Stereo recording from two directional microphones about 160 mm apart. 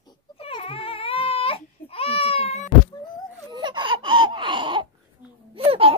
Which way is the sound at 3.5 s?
30° right (ahead or behind).